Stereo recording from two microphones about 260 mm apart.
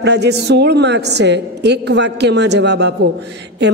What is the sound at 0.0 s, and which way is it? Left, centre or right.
A woman's voice, right.